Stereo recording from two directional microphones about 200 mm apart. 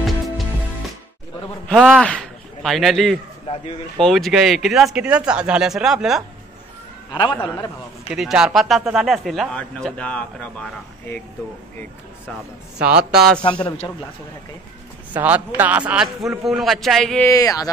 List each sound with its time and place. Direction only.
1.7 s speech: 5° right (ahead or behind)
7.1 s a man's voice: 20° left (ahead or behind)
8.1 s speech: 5° right (ahead or behind)
12.3 s speech: 5° right (ahead or behind)
13.4 s a man's voice: 25° left (ahead or behind)
15.1 s speech: 10° right (ahead or behind)
17.3 s speech: 15° left (ahead or behind)